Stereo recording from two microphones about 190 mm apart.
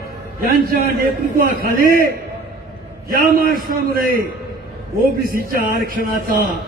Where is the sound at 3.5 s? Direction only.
50° right (ahead or behind).